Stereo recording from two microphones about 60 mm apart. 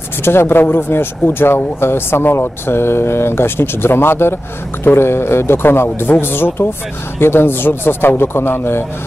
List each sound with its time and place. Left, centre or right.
0.2 s speech: left